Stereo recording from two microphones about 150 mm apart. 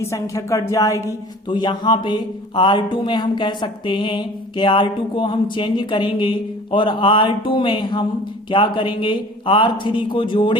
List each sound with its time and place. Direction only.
0.0 s a woman's voice: 20° left (ahead or behind)